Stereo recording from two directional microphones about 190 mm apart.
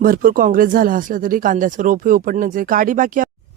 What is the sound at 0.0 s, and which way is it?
Speech, 50° right (ahead or behind).